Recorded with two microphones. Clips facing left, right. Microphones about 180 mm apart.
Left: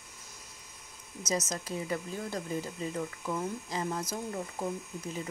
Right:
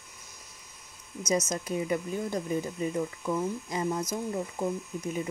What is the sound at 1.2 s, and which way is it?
Speech, 25° left (ahead or behind).